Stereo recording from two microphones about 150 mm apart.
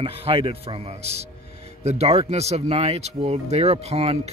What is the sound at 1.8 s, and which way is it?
Speech, 45° right (ahead or behind).